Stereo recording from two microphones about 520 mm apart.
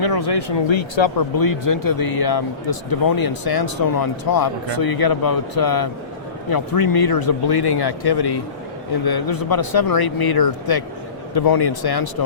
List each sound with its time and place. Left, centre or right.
0.0 s speech: left
1.4 s speech: left